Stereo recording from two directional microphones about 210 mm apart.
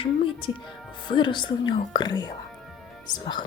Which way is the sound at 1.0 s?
20° left (ahead or behind).